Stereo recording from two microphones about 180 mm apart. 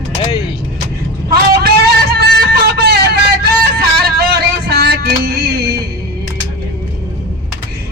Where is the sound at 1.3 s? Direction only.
60° right (ahead or behind).